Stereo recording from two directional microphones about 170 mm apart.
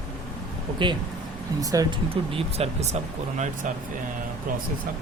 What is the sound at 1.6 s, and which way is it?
Speech, 20° right (ahead or behind).